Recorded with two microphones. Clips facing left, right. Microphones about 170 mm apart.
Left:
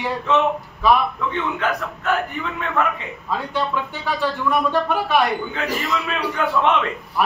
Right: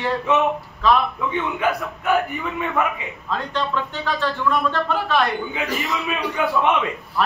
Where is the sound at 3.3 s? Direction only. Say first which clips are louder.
Left 1 dB; 10° left (ahead or behind).